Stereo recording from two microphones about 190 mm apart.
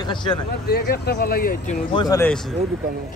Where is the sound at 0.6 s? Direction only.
55° left (ahead or behind).